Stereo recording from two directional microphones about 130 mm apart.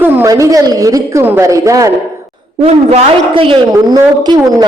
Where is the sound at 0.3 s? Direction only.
25° right (ahead or behind).